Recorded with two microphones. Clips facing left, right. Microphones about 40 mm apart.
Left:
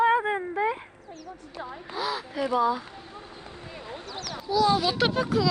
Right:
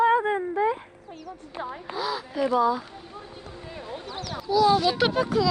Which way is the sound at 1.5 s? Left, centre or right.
Right.